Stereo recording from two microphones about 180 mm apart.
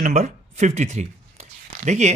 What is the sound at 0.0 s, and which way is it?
A man's voice, 40° right (ahead or behind).